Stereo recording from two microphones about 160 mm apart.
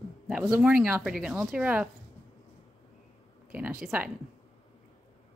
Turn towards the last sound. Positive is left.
turn(degrees=-5)  # may be behind; listen again after turning